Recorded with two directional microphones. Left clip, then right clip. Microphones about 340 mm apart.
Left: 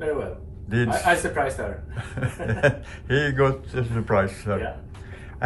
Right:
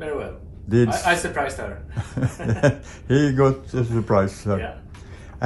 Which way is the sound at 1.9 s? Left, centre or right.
Centre.